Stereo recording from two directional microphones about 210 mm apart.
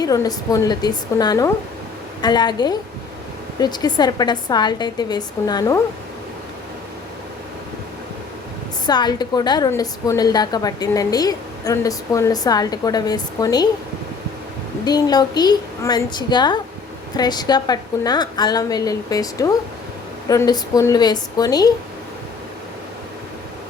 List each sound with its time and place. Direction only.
0.0 s a woman's voice: 15° left (ahead or behind)
8.9 s a woman's voice: 20° left (ahead or behind)
14.8 s a woman's voice: 20° left (ahead or behind)